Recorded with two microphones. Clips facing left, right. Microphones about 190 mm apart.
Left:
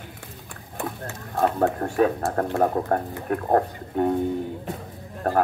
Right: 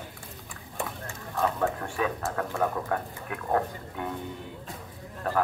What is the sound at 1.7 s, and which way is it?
Speech, 40° left (ahead or behind).